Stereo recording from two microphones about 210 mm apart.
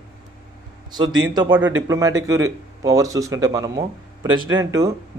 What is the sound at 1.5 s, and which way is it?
Speech, 10° right (ahead or behind).